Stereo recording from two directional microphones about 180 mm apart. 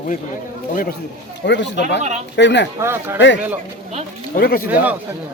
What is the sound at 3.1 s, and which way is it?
Speech, 80° left.